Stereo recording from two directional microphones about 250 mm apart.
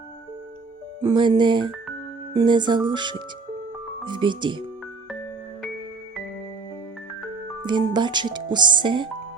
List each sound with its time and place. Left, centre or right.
1.0 s speech: centre
7.6 s speech: centre